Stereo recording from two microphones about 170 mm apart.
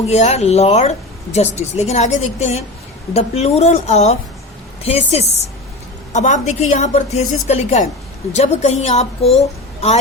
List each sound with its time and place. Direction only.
0.1 s a woman's voice: 40° left (ahead or behind)